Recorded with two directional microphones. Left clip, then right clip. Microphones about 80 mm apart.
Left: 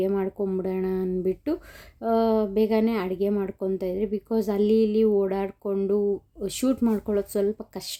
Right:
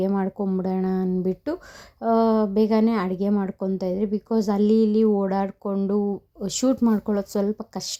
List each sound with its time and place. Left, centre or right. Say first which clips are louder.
0.0 s speech: even; right
3.3 s speech: even; right